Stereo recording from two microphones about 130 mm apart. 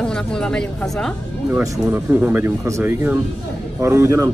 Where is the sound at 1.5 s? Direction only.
15° right (ahead or behind).